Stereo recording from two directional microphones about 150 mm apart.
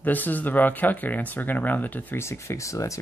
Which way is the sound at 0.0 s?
10° left (ahead or behind).